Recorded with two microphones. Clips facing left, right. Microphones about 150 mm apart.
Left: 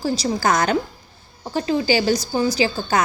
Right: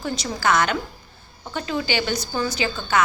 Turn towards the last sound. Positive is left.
turn(degrees=35)  # may be behind; listen again after turning